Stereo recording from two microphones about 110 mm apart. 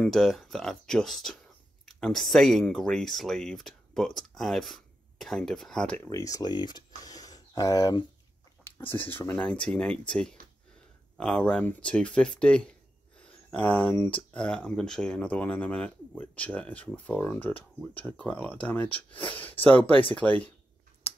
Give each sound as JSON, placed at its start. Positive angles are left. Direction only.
{"t": 0.0, "sound": "speech", "side_deg": 5}
{"t": 6.0, "sound": "speech", "side_deg": 35}
{"t": 8.6, "sound": "speech", "side_deg": 20}
{"t": 9.4, "sound": "speech", "side_deg": 10}
{"t": 13.2, "sound": "a sound", "side_deg": 10}
{"t": 13.9, "sound": "speech", "side_deg": 10}